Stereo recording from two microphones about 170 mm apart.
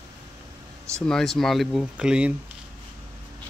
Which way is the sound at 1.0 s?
5° left (ahead or behind).